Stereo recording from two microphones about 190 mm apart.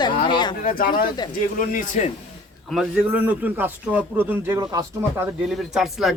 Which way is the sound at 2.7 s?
5° right (ahead or behind).